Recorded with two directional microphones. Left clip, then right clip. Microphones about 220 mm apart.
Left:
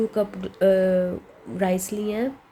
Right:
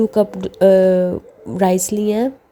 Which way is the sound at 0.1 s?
35° right (ahead or behind).